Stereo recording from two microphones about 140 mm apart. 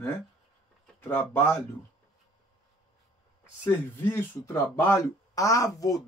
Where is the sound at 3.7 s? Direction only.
15° left (ahead or behind).